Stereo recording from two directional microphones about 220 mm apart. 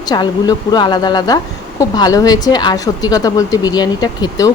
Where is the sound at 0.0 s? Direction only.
20° left (ahead or behind).